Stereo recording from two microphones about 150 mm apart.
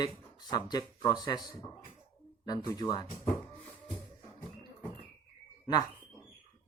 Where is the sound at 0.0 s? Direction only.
25° left (ahead or behind).